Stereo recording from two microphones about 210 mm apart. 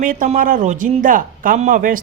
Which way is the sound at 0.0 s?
40° right (ahead or behind).